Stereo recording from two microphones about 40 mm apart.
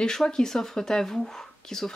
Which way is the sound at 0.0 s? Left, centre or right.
Centre.